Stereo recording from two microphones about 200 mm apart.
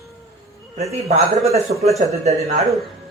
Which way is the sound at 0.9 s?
30° right (ahead or behind).